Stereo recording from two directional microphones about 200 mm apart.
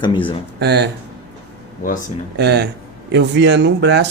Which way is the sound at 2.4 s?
55° right (ahead or behind).